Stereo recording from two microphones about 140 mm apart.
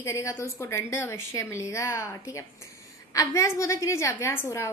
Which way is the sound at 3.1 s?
25° left (ahead or behind).